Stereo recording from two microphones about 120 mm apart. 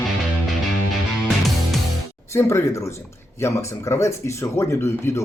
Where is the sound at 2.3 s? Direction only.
20° left (ahead or behind).